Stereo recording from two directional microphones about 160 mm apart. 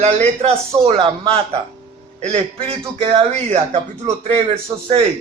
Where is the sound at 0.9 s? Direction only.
35° right (ahead or behind).